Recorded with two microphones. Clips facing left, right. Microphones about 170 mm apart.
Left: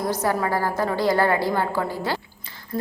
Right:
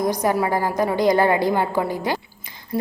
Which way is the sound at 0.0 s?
15° right (ahead or behind).